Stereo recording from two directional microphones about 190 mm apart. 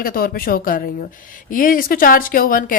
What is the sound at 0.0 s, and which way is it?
Speech, 50° left (ahead or behind).